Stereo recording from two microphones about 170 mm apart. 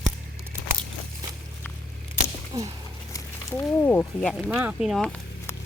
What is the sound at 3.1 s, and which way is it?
Speech, 20° left (ahead or behind).